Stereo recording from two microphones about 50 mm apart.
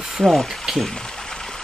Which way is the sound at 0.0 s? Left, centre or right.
Centre.